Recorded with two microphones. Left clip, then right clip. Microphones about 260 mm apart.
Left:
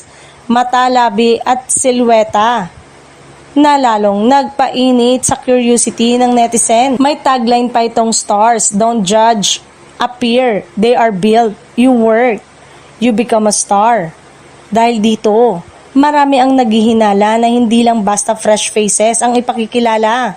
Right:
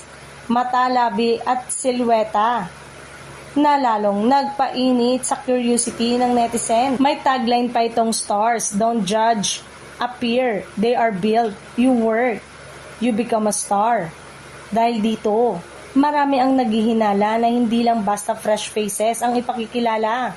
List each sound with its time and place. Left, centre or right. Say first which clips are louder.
0.4 s a woman's voice: left 8 dB; left